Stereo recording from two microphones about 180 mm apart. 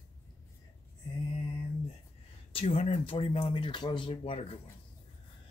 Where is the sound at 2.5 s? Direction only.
35° left (ahead or behind).